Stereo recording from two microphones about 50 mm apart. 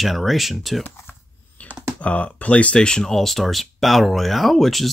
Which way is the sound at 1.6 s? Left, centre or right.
Left.